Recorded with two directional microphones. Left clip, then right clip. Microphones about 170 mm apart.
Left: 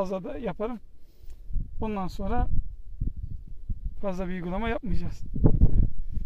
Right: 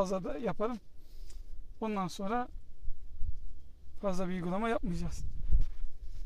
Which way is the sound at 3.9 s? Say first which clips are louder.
Left 3 dB; 30° left (ahead or behind).